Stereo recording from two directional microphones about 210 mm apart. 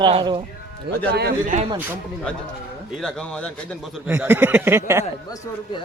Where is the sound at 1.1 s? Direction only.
50° right (ahead or behind).